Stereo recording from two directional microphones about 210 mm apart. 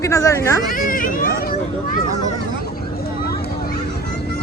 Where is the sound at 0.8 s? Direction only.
40° left (ahead or behind).